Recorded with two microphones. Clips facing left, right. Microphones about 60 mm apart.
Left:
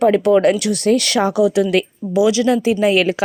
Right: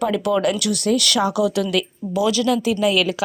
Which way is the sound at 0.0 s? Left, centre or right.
Left.